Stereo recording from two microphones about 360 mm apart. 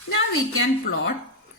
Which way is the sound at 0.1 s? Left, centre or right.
Left.